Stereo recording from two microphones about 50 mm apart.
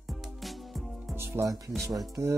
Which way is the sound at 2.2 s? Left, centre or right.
Right.